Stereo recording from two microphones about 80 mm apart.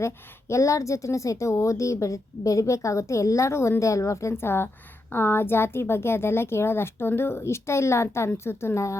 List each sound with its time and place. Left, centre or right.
0.0 s a woman's voice: left